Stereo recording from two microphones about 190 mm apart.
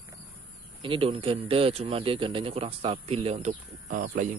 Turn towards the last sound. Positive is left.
turn(degrees=-40)  # may be behind; listen again after turning